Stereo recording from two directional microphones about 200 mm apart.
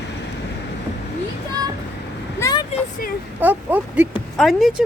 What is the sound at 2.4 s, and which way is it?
Vehicle, 20° left (ahead or behind).